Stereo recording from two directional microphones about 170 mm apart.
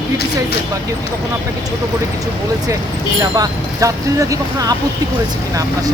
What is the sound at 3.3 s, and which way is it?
Speech, 20° right (ahead or behind).